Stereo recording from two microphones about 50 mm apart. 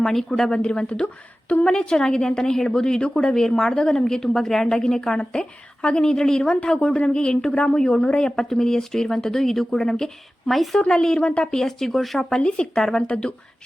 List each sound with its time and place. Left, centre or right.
0.0 s a woman's voice: centre; by 1.6 s left
1.6 s a woman's voice: centre
11.2 s speech: left
11.5 s speech: centre
12.4 s a woman's voice: centre